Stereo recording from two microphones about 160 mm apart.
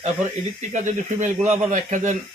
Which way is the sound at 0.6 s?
50° right (ahead or behind).